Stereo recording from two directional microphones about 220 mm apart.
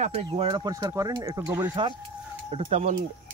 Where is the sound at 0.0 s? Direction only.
25° right (ahead or behind); by 1.7 s 10° right (ahead or behind).